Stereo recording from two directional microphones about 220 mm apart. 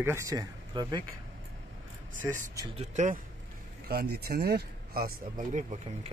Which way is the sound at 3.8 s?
45° right (ahead or behind).